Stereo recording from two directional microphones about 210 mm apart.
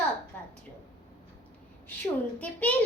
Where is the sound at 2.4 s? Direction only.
5° left (ahead or behind).